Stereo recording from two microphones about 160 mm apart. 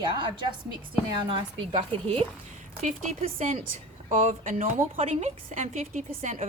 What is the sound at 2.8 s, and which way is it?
A woman's voice, 45° right (ahead or behind).